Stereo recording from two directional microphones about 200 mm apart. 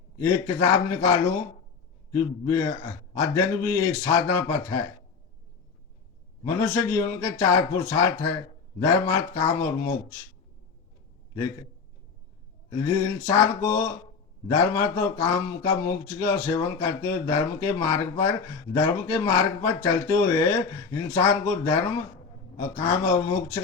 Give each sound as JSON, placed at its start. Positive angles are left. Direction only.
{"t": 0.2, "sound": "speech", "side_deg": 15}
{"t": 2.1, "sound": "speech", "side_deg": 15}
{"t": 6.6, "sound": "speech", "side_deg": 15}
{"t": 12.8, "sound": "speech", "side_deg": 15}